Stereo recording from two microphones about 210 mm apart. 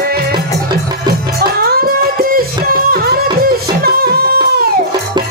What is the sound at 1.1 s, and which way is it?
Music, 45° right (ahead or behind).